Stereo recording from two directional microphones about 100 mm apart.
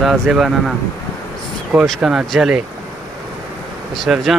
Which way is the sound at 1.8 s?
Centre (ahead or behind).